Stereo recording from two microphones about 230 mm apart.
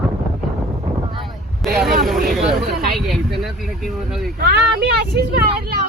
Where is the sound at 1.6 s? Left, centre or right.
Centre.